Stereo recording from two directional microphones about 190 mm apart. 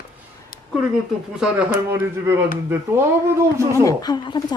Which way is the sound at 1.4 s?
10° right (ahead or behind).